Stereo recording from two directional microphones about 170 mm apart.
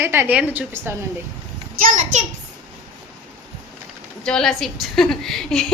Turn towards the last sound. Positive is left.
turn(degrees=5)  # may be behind; listen again after turning